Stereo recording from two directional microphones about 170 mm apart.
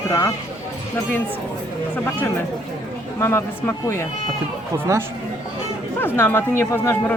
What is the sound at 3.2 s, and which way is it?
Speech, 15° left (ahead or behind).